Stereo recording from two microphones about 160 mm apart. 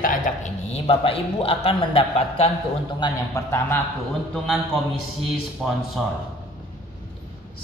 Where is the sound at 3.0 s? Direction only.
20° left (ahead or behind).